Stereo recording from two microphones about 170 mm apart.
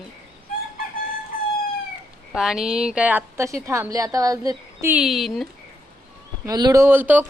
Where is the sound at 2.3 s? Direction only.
5° right (ahead or behind); by 4.9 s 20° right (ahead or behind).